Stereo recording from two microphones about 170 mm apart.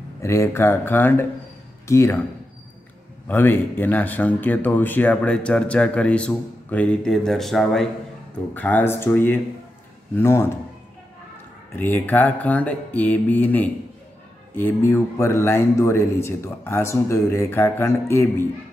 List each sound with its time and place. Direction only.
0.2 s speech: 15° left (ahead or behind)
3.3 s speech: 10° left (ahead or behind)
11.7 s speech: 10° left (ahead or behind)